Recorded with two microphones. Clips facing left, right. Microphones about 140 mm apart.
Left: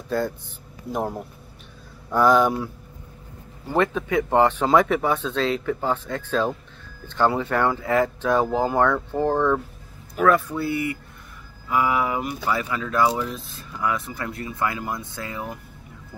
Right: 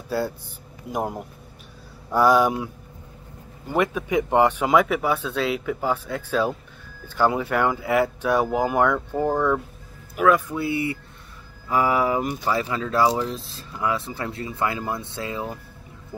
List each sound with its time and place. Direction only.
0.1 s speech: 10° right (ahead or behind)
10.6 s speech: 25° right (ahead or behind)
11.7 s speech: 35° right (ahead or behind)